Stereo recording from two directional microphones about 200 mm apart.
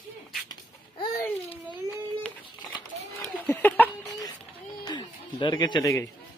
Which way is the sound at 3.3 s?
10° left (ahead or behind).